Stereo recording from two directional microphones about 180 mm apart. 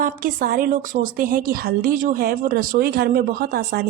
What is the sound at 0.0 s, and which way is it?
A woman's voice, 50° right (ahead or behind).